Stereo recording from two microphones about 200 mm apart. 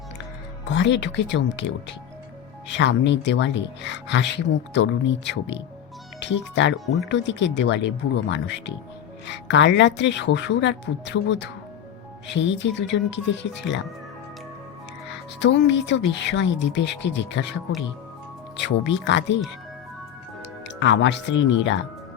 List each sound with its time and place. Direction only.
0.7 s speech: 65° left (ahead or behind)
15.4 s speech: 60° left (ahead or behind)
18.5 s speech: 65° left (ahead or behind)
20.4 s speech: 60° left (ahead or behind)